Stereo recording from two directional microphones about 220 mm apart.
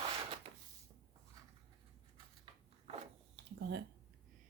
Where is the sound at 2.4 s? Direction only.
25° right (ahead or behind).